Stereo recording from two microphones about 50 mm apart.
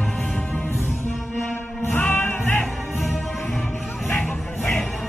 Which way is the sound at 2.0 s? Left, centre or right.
Left.